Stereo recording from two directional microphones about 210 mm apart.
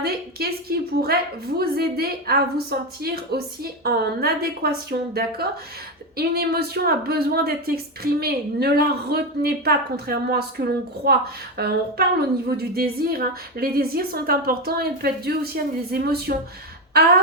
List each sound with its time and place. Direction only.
0.0 s speech: 45° right (ahead or behind)